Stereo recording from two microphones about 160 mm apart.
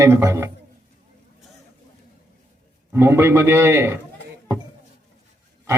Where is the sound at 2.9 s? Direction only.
15° right (ahead or behind).